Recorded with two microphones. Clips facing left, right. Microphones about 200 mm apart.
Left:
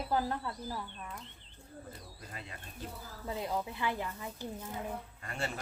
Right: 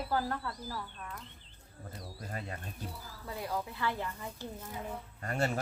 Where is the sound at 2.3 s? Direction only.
45° right (ahead or behind).